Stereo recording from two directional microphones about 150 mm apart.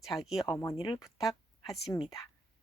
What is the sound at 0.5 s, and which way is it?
Speech, 20° left (ahead or behind).